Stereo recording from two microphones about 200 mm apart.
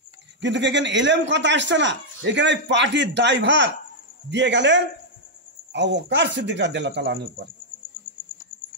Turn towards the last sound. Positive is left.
turn(degrees=-60)  # may be behind; listen again after turning